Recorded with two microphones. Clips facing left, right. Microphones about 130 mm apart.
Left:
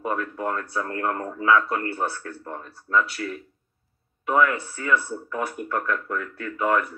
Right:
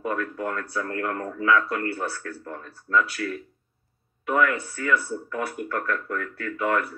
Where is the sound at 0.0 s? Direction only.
30° left (ahead or behind).